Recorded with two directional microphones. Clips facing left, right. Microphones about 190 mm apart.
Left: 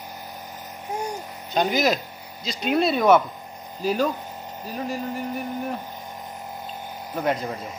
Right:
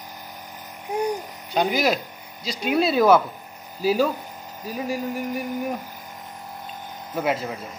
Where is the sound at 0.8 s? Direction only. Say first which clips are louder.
Right 5 dB; 15° right (ahead or behind).